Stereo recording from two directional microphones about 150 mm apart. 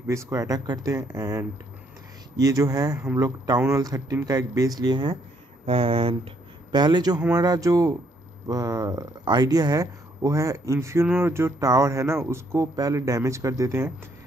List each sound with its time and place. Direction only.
0.0 s speech: 20° right (ahead or behind)